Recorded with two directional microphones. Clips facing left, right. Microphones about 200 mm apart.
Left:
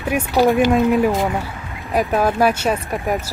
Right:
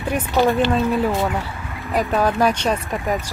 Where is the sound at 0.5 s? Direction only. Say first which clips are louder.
Left 4 dB; 15° left (ahead or behind).